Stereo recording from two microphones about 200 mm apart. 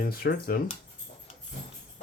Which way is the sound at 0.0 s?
45° left (ahead or behind).